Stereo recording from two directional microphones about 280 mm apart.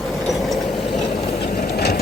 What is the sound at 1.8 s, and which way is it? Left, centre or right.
Sewing machine, left.